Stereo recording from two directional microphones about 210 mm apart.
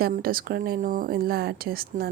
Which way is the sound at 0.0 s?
45° right (ahead or behind).